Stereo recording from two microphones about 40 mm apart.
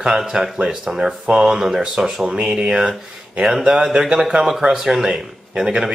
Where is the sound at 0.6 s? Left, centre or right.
Centre.